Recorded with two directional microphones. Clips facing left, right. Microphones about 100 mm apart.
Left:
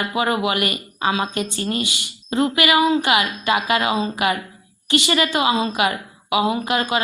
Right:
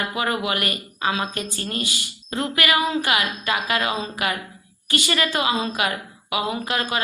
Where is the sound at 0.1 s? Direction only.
20° left (ahead or behind).